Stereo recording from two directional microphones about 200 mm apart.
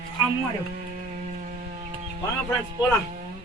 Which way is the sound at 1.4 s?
40° right (ahead or behind).